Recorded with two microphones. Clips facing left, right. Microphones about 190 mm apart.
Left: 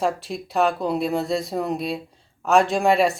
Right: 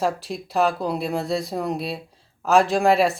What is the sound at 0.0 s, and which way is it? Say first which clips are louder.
Speech: even; centre (ahead or behind).